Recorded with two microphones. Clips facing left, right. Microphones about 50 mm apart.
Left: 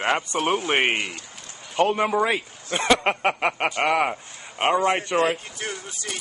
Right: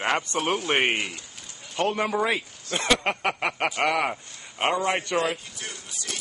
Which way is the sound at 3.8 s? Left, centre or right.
Centre.